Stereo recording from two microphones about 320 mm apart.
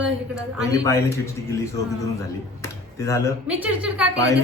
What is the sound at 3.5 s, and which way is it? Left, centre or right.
Speech, centre.